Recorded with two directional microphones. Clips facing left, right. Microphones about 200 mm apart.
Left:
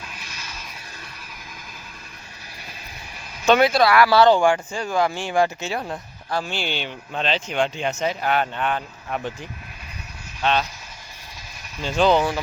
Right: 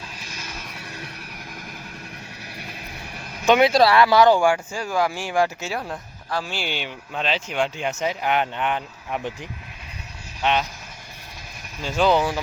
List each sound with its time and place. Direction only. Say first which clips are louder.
0.3 s music: right 3 dB; 55° right (ahead or behind)
3.4 s speech: even; 15° right (ahead or behind)
3.7 s speech: right 1 dB; 30° right (ahead or behind); by 10.7 s 15° right (ahead or behind)
11.8 s speech: left 1 dB; 10° right (ahead or behind)